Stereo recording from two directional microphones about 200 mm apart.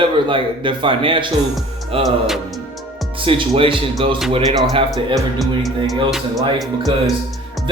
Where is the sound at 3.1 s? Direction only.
25° right (ahead or behind).